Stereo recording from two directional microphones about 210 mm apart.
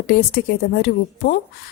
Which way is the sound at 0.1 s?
50° left (ahead or behind).